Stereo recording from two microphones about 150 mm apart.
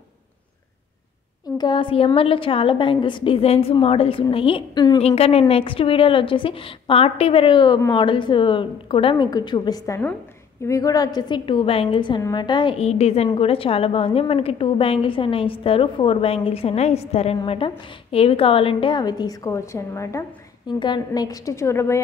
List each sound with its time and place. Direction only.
1.6 s a woman's voice: 30° left (ahead or behind)
12.7 s a woman's voice: 45° left (ahead or behind); by 22.0 s 20° left (ahead or behind)